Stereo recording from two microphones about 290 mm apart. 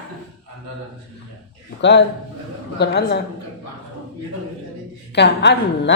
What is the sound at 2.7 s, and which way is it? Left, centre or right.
Speech, left.